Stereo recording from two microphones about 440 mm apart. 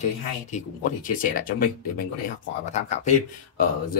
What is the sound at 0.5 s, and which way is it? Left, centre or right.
Speech, centre.